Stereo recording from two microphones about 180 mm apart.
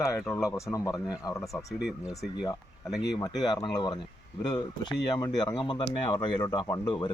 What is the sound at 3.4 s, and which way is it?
Speech, 25° left (ahead or behind).